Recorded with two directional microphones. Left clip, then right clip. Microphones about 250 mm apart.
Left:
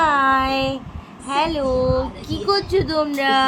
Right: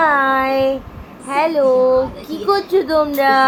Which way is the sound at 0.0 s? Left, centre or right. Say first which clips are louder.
Right 2 dB; centre.